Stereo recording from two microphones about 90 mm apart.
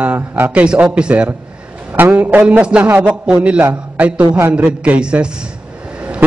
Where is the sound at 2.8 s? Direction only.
25° right (ahead or behind).